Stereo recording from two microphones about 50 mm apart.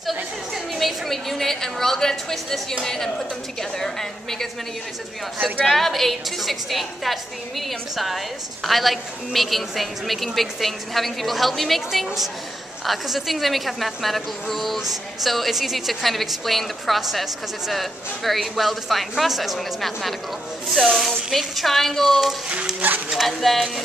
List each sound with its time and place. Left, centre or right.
0.7 s a woman's voice: centre
5.7 s a woman's voice: centre
22.8 s speech: right
23.1 s a woman's voice: centre